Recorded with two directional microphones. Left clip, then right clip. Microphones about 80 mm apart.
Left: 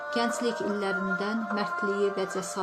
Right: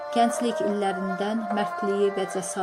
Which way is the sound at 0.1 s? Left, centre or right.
Right.